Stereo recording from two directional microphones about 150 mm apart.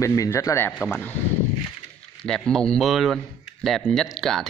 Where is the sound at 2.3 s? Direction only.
5° left (ahead or behind).